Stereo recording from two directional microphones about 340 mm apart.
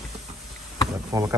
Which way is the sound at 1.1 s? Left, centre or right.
Centre.